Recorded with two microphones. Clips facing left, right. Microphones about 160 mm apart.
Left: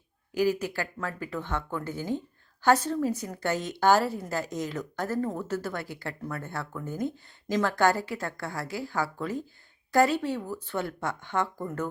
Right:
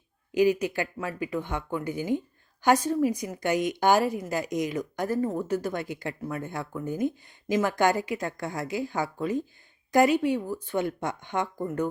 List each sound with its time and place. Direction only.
0.3 s speech: 20° right (ahead or behind)